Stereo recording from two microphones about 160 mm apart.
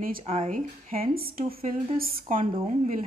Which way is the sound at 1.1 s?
70° right (ahead or behind).